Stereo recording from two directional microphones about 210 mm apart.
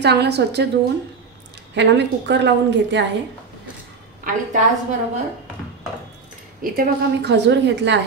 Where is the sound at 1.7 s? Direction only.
55° right (ahead or behind).